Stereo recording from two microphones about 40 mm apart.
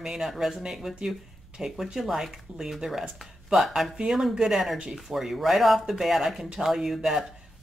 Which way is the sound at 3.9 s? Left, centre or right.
Centre.